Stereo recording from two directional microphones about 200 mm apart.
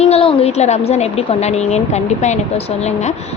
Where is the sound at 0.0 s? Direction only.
30° left (ahead or behind).